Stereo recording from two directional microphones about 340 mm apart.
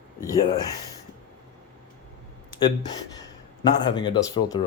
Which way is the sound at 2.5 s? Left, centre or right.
Centre.